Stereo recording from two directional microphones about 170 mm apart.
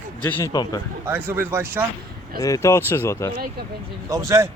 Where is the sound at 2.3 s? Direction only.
20° left (ahead or behind).